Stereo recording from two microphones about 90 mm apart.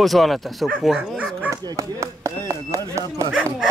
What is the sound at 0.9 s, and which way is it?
Speech, 10° right (ahead or behind).